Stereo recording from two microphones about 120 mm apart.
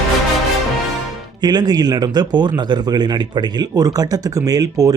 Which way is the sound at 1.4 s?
35° right (ahead or behind).